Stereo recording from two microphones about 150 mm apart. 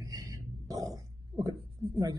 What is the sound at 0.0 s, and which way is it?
Speech, 20° right (ahead or behind).